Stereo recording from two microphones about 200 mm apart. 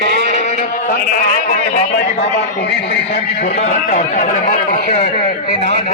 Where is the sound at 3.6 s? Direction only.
35° left (ahead or behind).